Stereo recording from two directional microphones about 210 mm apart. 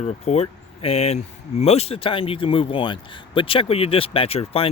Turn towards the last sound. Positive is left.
turn(degrees=25)  # may be behind; listen again after turning